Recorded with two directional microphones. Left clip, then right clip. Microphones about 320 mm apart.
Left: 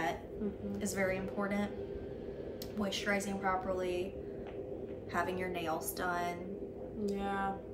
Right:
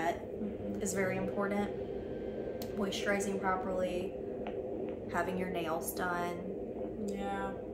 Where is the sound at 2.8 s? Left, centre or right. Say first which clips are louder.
Right 1 dB; centre.